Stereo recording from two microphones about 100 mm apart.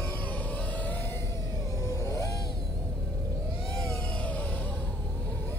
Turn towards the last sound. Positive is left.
turn(degrees=15)  # may be behind; listen again after turning